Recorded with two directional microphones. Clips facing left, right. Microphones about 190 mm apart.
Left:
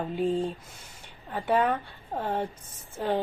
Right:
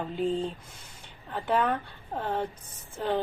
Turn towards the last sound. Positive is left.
turn(degrees=15)  # may be behind; listen again after turning